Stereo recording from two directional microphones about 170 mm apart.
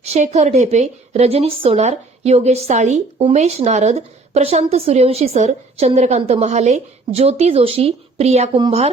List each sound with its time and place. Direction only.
0.0 s a woman's voice: 40° right (ahead or behind)